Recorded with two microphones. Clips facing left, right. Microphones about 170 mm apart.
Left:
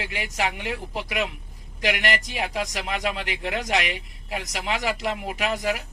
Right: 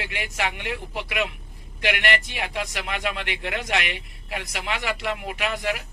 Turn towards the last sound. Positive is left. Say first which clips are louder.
# left 1 dB
turn(degrees=35)  # may be behind; listen again after turning